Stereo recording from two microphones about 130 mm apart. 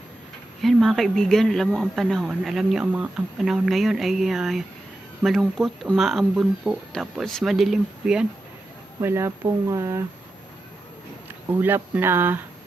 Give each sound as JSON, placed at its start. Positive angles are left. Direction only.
{"t": 0.6, "sound": "a man's voice", "side_deg": 0}
{"t": 9.0, "sound": "speech", "side_deg": -20}
{"t": 11.4, "sound": "speech", "side_deg": -15}